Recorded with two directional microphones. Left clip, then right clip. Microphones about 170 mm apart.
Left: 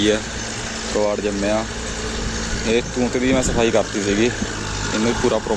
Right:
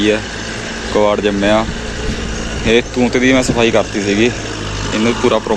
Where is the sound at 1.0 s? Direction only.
Centre (ahead or behind).